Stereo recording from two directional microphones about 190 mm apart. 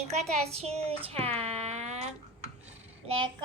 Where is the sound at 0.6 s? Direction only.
30° right (ahead or behind).